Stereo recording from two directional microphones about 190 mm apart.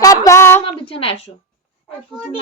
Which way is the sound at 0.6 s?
30° left (ahead or behind).